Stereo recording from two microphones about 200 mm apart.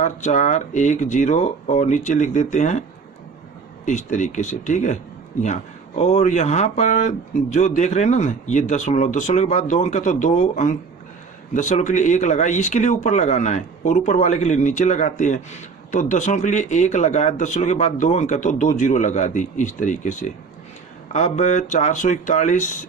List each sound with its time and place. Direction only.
0.0 s speech: 40° left (ahead or behind)
3.8 s speech: 40° left (ahead or behind)
6.0 s speech: 35° left (ahead or behind)